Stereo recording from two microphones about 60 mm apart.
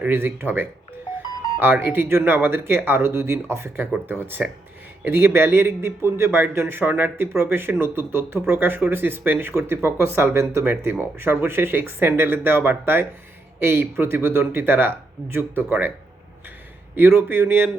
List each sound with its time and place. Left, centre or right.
0.0 s a man's voice: right
16.9 s a man's voice: right